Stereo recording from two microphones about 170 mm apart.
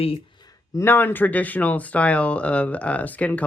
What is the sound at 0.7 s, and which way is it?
Speech, 15° left (ahead or behind).